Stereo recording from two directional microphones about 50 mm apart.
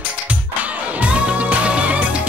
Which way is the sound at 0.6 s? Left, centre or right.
Right.